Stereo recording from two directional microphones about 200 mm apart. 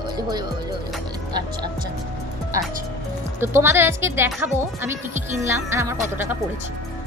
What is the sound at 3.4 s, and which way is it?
Speech, 10° right (ahead or behind).